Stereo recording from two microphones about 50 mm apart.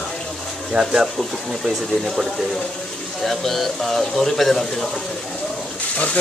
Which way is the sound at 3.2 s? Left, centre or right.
Centre.